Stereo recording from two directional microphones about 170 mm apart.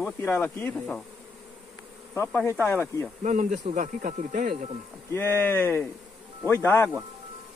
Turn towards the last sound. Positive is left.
turn(degrees=15)  # may be behind; listen again after turning